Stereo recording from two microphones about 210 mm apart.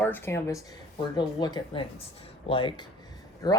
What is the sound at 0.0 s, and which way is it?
Speech, 10° left (ahead or behind).